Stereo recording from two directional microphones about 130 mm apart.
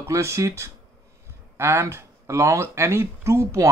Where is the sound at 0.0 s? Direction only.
20° right (ahead or behind).